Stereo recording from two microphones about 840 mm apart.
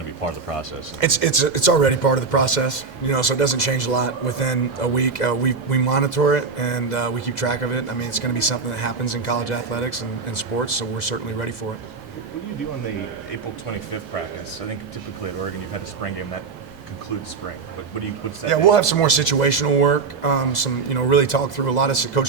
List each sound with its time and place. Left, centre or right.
0.9 s speech: left
18.4 s speech: left